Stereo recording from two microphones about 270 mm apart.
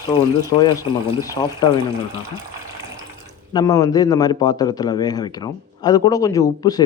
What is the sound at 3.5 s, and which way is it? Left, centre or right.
A man's voice, centre.